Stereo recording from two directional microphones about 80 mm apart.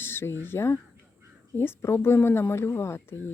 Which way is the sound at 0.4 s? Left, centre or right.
Left.